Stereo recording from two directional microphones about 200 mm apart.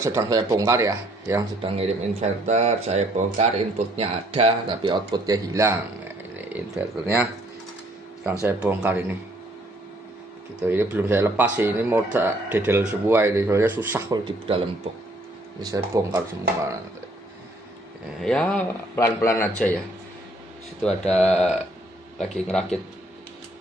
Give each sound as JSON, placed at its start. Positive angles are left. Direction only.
{"t": 0.0, "sound": "speech", "side_deg": -15}
{"t": 1.6, "sound": "speech", "side_deg": -30}
{"t": 8.3, "sound": "speech", "side_deg": -5}
{"t": 10.6, "sound": "speech", "side_deg": -10}
{"t": 15.6, "sound": "speech", "side_deg": -15}
{"t": 18.2, "sound": "a man's voice", "side_deg": 5}
{"t": 21.0, "sound": "speech", "side_deg": 35}
{"t": 22.5, "sound": "speech", "side_deg": 5}